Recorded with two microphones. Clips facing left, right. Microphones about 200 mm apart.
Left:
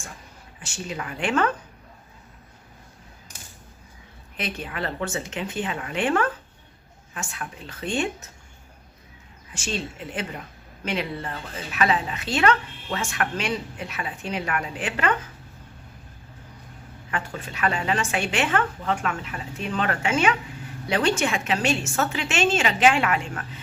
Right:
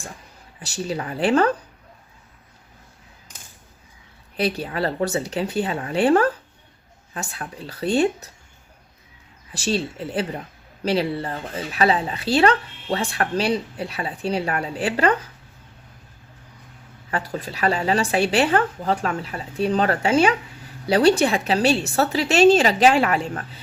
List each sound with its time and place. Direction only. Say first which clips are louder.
0.6 s speech: right 6 dB; 35° right (ahead or behind)
4.4 s speech: right 7 dB; 35° right (ahead or behind)
9.5 s speech: right 7 dB; 35° right (ahead or behind)
17.1 s speech: right 4 dB; 35° right (ahead or behind)